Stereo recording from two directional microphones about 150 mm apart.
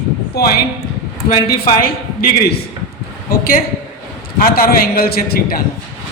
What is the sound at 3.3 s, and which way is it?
A woman's voice, 75° left (ahead or behind).